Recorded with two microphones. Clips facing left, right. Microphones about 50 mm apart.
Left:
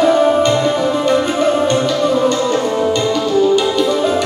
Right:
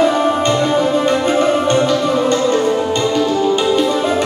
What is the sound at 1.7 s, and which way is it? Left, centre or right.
Music, centre.